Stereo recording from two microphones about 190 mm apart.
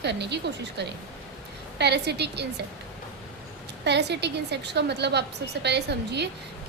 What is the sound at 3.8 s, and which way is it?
A woman's voice, 65° right (ahead or behind).